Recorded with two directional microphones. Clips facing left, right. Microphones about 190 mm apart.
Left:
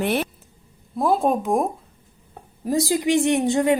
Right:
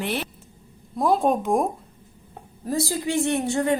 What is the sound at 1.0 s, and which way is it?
Speech, centre (ahead or behind).